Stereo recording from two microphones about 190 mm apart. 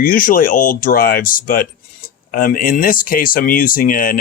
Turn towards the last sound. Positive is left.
turn(degrees=45)  # may be behind; listen again after turning